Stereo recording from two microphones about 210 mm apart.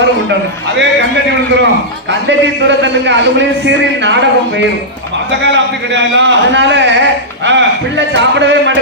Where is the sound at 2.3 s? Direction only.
60° right (ahead or behind).